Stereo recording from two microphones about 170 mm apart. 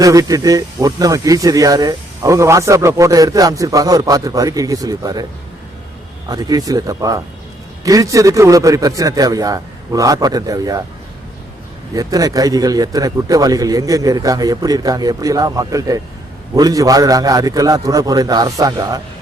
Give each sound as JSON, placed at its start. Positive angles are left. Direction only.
{"t": 0.0, "sound": "speech", "side_deg": -20}
{"t": 6.2, "sound": "speech", "side_deg": -20}
{"t": 11.9, "sound": "speech", "side_deg": -20}